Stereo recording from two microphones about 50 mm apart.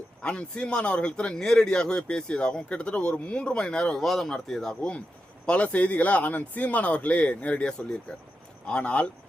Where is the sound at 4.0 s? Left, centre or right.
Centre.